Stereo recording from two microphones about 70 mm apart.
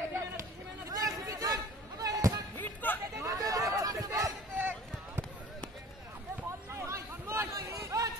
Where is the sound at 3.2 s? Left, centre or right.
Right.